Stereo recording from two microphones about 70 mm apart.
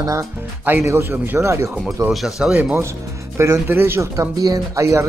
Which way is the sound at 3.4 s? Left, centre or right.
Right.